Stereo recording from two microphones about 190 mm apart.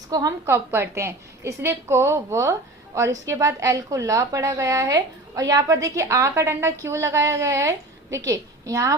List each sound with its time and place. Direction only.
0.1 s a woman's voice: 20° right (ahead or behind)